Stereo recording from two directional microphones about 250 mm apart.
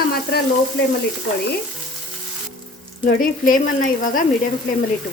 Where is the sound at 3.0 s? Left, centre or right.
Left.